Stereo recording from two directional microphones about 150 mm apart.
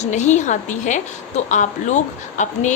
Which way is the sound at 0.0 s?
50° left (ahead or behind).